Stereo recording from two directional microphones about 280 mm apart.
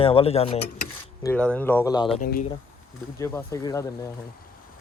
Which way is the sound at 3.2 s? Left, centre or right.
Centre.